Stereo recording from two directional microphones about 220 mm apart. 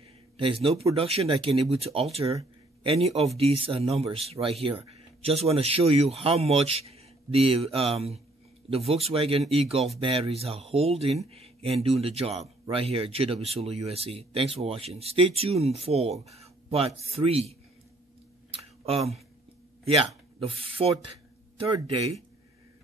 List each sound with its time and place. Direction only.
0.4 s a man's voice: 25° right (ahead or behind)
18.5 s a sound: 25° right (ahead or behind)
20.3 s speech: 25° right (ahead or behind)